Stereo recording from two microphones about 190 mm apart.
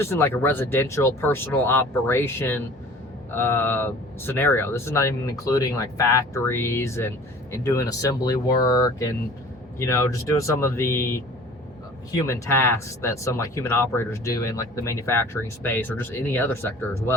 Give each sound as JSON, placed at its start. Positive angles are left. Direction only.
{"t": 0.0, "sound": "speech", "side_deg": 15}